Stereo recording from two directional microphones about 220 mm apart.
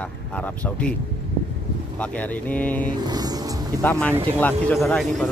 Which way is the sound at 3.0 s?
15° right (ahead or behind).